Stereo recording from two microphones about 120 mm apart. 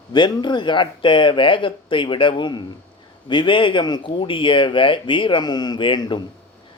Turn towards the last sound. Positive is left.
turn(degrees=40)  # may be behind; listen again after turning